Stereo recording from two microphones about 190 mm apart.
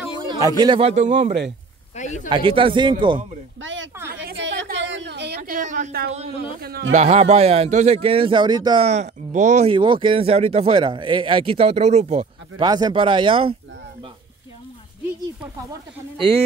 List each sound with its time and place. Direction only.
0.3 s speech: 20° right (ahead or behind); by 1.3 s 35° right (ahead or behind)
2.0 s speech: 40° left (ahead or behind)
2.2 s speech: 25° right (ahead or behind)
3.6 s speech: 80° right
4.4 s a sound: 70° right (ahead or behind)
5.4 s a man's voice: 45° right (ahead or behind)
6.9 s speech: 35° right (ahead or behind)
8.8 s speech: 35° right (ahead or behind)
9.8 s speech: 25° right (ahead or behind)
12.6 s speech: 20° right (ahead or behind)